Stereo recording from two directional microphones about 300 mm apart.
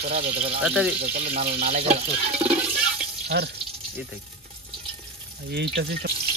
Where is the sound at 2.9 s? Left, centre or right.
Right.